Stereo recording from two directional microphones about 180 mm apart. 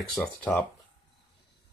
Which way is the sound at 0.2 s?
5° left (ahead or behind).